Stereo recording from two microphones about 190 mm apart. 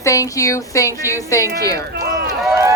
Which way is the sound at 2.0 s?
55° right (ahead or behind).